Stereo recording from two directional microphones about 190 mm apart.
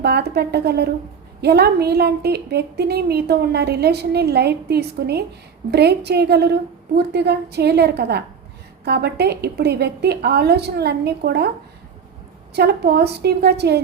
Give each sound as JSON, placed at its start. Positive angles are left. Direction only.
{"t": 0.0, "sound": "a woman's voice", "side_deg": -60}
{"t": 12.5, "sound": "a woman's voice", "side_deg": -55}